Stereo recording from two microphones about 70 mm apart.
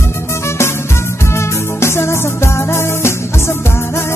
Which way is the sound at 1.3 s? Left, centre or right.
Left.